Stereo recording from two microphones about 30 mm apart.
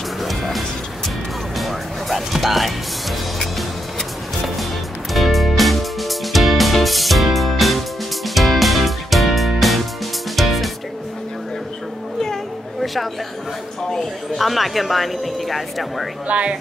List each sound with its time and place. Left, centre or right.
0.2 s music: centre
5.1 s music: centre
12.8 s chatter: centre
14.4 s speech: centre
16.3 s speech: right